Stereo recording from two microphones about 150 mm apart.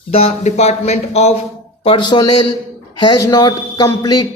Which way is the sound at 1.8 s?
35° left (ahead or behind).